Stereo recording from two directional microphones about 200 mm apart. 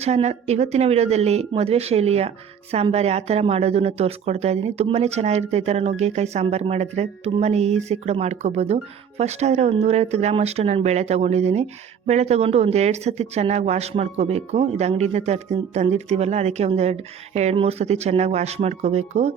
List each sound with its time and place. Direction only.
0.0 s speech: 35° right (ahead or behind)